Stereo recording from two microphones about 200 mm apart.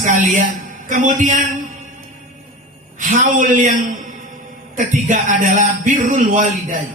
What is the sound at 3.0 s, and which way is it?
Speech, 40° right (ahead or behind).